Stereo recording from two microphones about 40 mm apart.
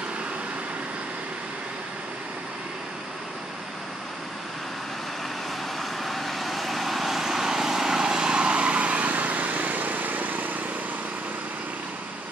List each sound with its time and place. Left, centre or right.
5.8 s vehicle: centre; by 10.6 s right